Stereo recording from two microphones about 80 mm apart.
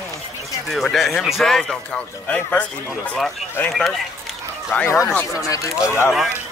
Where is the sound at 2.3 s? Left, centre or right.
Centre.